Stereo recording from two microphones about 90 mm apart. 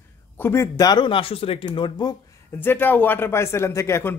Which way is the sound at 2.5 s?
20° left (ahead or behind).